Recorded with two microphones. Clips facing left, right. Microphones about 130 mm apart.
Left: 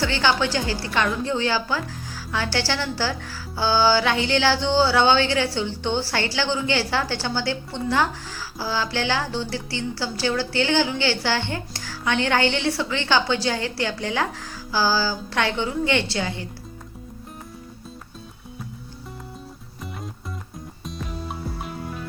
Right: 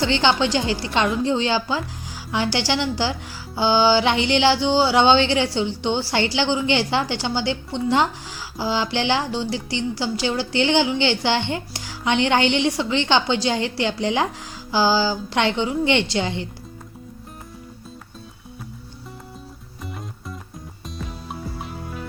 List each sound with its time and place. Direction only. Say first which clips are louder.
0.0 s speech: right 3 dB; 20° right (ahead or behind)